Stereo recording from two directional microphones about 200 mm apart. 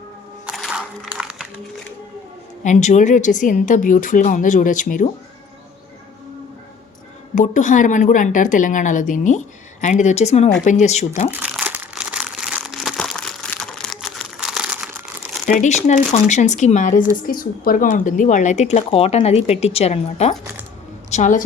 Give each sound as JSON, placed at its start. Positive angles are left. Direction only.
{"t": 0.4, "sound": "music", "side_deg": 0}
{"t": 2.6, "sound": "speech", "side_deg": 35}
{"t": 7.3, "sound": "speech", "side_deg": 40}
{"t": 11.3, "sound": "crumpling", "side_deg": -5}
{"t": 15.4, "sound": "a woman's voice", "side_deg": 40}